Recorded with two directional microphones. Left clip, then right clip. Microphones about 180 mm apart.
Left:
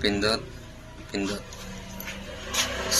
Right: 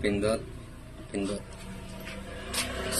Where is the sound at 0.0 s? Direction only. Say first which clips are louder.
Left 3 dB; 20° right (ahead or behind).